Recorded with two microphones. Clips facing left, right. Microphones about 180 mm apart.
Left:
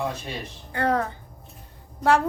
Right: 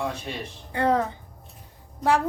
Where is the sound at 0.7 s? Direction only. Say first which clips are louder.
Right 1 dB; 25° right (ahead or behind).